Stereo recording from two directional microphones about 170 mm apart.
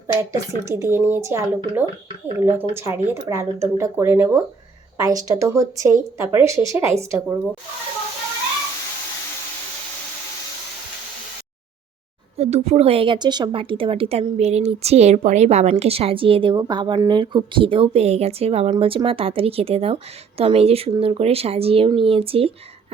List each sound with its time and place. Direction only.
0.1 s speech: 20° right (ahead or behind)
12.4 s speech: 40° right (ahead or behind)